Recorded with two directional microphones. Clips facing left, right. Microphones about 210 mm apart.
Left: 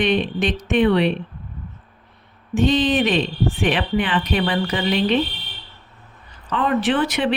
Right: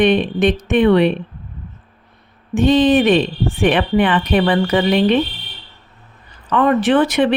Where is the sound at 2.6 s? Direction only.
55° right (ahead or behind).